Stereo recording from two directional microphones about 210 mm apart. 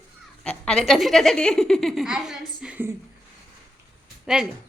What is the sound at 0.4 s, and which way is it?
A woman's voice, 5° left (ahead or behind).